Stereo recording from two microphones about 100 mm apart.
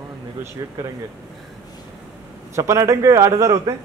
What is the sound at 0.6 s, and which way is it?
Speech, 35° right (ahead or behind).